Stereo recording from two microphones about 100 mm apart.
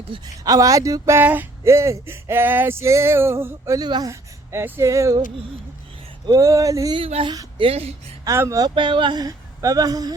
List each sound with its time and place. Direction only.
0.4 s speech: 35° right (ahead or behind); by 1.5 s 20° right (ahead or behind)
1.6 s male singing: 30° right (ahead or behind)
3.8 s speech: 45° right (ahead or behind)
4.1 s speech: 25° right (ahead or behind)
6.3 s speech: 35° right (ahead or behind)
6.9 s speech: 70° right (ahead or behind)
7.6 s speech: 90° right
8.2 s speech: 30° right (ahead or behind)
8.6 s speech: 55° right (ahead or behind); by 10.2 s 40° right (ahead or behind)